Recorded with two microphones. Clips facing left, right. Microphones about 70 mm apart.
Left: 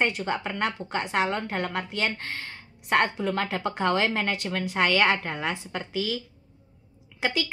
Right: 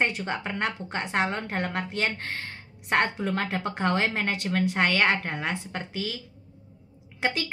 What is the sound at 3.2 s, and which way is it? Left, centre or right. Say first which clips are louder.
Speech: left 1 dB; right.